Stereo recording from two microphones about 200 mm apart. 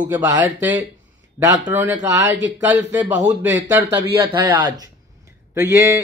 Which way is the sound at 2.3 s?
65° right (ahead or behind).